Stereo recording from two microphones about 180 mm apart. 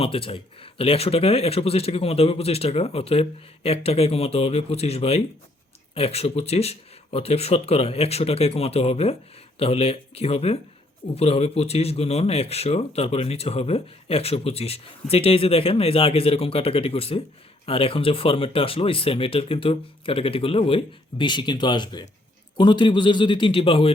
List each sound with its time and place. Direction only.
0.0 s a man's voice: 30° left (ahead or behind)